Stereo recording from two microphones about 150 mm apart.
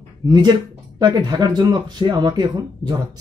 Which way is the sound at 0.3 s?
30° right (ahead or behind).